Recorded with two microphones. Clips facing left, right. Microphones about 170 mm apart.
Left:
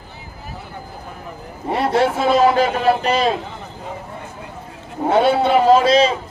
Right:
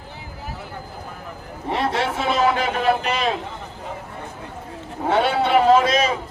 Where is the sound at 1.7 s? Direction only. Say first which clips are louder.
Left 5 dB; 40° left (ahead or behind).